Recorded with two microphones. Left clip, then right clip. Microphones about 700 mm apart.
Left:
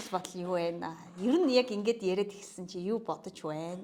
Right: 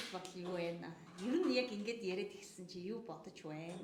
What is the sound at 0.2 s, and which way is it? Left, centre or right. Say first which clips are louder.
A woman's voice: left 11 dB; left.